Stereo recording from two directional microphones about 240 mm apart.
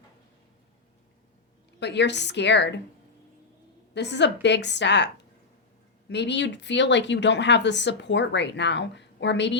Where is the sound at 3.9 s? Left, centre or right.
Left.